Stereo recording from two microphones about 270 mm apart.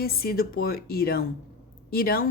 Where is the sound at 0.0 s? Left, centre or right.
Left.